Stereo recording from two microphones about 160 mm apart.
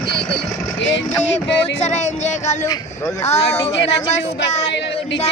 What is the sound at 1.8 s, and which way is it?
Speech, 45° left (ahead or behind).